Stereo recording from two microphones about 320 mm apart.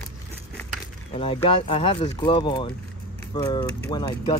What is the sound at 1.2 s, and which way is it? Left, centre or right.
Speech, centre.